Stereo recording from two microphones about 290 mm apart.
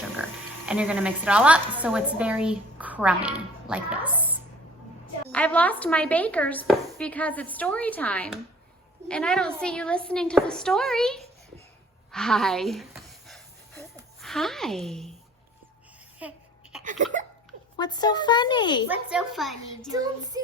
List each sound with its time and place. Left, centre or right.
0.2 s speech: centre
5.3 s speech: centre
12.1 s a sound: centre
14.2 s a woman's voice: centre
16.2 s speech: centre
16.8 s speech: right
17.7 s speech: centre
18.9 s speech: centre
19.9 s child singing: centre